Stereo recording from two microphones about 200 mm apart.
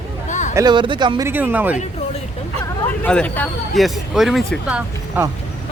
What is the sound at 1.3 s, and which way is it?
Speech, 10° right (ahead or behind).